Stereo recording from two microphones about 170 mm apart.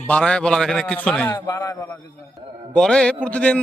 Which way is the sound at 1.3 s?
20° left (ahead or behind).